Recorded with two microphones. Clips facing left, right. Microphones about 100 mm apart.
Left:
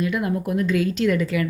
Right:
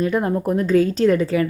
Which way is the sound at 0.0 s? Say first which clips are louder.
Right 4 dB; 35° right (ahead or behind).